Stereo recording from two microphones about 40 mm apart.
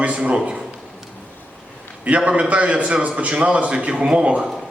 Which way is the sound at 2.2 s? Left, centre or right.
Right.